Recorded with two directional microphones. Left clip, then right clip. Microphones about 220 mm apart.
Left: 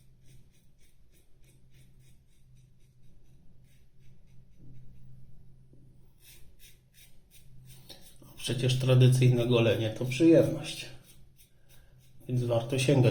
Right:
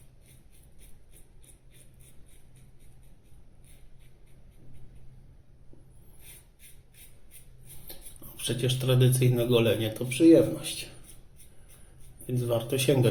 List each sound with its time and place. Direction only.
8.4 s speech: 15° right (ahead or behind)
12.2 s a man's voice: 20° right (ahead or behind)